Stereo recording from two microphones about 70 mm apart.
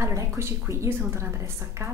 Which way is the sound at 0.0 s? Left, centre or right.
Right.